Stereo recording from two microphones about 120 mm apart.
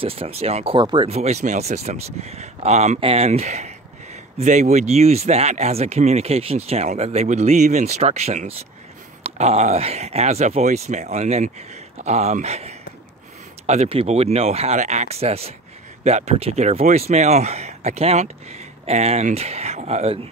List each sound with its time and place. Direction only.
0.0 s speech: 55° right (ahead or behind)
0.7 s speech: 40° right (ahead or behind)
1.0 s speech: 65° right (ahead or behind)
3.0 s speech: 55° right (ahead or behind)